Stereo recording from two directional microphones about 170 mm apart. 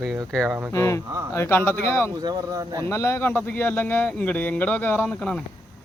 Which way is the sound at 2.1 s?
20° right (ahead or behind).